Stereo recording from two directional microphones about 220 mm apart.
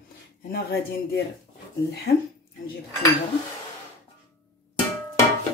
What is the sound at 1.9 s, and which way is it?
Speech, 45° left (ahead or behind).